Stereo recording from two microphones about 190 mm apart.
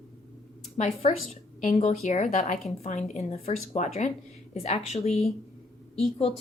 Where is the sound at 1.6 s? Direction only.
40° left (ahead or behind).